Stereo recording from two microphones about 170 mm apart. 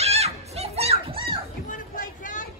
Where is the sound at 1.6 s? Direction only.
50° left (ahead or behind).